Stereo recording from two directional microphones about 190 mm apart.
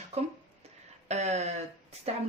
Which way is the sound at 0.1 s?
35° right (ahead or behind).